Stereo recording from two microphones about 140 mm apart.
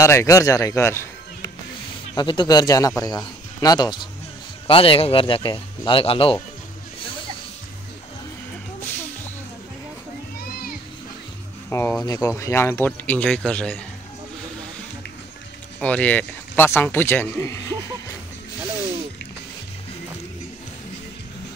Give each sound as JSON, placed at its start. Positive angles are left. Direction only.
{"t": 0.0, "sound": "speech", "side_deg": 20}
{"t": 2.1, "sound": "speech", "side_deg": 30}
{"t": 8.8, "sound": "a sound", "side_deg": 15}
{"t": 11.7, "sound": "speech", "side_deg": 20}
{"t": 15.8, "sound": "speech", "side_deg": 10}